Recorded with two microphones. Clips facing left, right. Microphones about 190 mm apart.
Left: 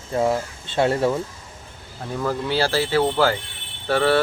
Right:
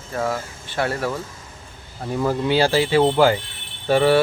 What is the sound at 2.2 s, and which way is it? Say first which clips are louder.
Speech: right 4 dB; 15° right (ahead or behind).